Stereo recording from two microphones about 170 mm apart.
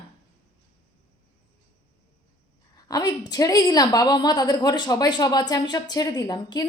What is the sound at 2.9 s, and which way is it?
A woman's voice, 20° left (ahead or behind).